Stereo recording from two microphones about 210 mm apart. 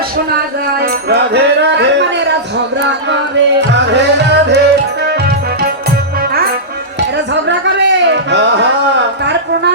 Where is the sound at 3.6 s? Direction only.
55° right (ahead or behind).